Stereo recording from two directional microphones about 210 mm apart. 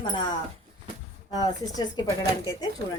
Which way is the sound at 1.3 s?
20° left (ahead or behind).